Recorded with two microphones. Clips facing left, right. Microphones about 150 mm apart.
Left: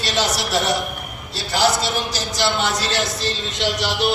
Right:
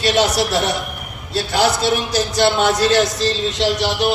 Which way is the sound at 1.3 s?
60° right (ahead or behind).